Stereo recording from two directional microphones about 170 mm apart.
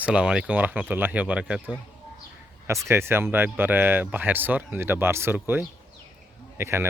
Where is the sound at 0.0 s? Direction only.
5° right (ahead or behind).